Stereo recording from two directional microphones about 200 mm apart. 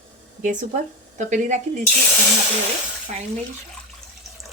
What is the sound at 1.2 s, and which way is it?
Speech, 40° right (ahead or behind).